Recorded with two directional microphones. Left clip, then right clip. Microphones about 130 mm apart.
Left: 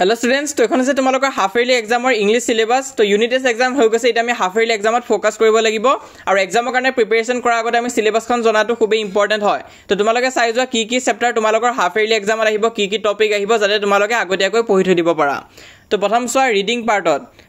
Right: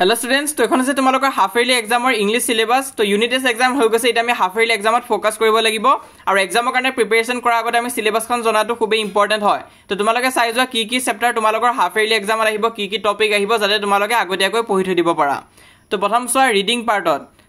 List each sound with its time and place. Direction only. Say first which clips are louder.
0.0 s speech: left 1 dB; 25° left (ahead or behind)